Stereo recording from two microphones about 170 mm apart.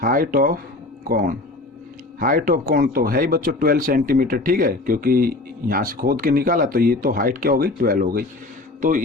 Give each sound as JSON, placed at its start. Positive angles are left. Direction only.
{"t": 0.0, "sound": "speech", "side_deg": -55}